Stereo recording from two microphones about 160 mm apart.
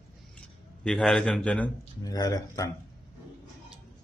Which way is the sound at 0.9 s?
5° left (ahead or behind).